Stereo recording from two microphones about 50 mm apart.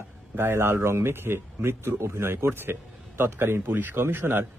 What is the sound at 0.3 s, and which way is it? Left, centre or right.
A man's voice, right.